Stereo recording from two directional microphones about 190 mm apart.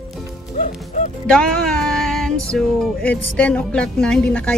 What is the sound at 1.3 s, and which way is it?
Music, 5° left (ahead or behind).